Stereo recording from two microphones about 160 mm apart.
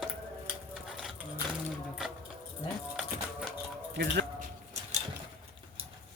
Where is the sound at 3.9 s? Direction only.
90° right.